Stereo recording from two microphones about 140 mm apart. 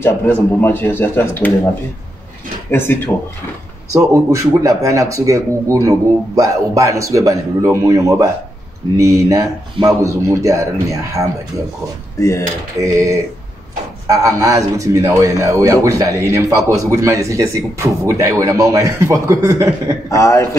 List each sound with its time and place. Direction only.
0.0 s speech: 15° left (ahead or behind)
2.7 s speech: 15° left (ahead or behind)
3.9 s speech: 25° right (ahead or behind)
12.2 s a man's voice: 20° left (ahead or behind)
12.7 s speech: 25° right (ahead or behind)
20.1 s a man's voice: 25° left (ahead or behind)